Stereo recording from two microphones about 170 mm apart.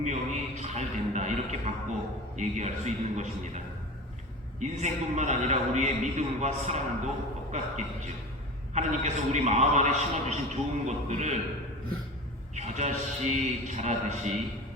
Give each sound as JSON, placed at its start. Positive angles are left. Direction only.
{"t": 0.0, "sound": "a man's voice", "side_deg": -45}
{"t": 4.6, "sound": "a man's voice", "side_deg": -45}
{"t": 12.5, "sound": "a man's voice", "side_deg": -40}